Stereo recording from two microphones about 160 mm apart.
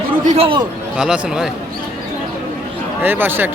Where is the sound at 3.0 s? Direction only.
15° right (ahead or behind).